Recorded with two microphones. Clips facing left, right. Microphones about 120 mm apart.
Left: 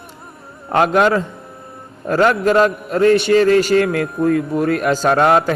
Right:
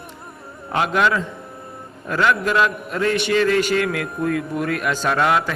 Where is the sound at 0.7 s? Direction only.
45° left (ahead or behind).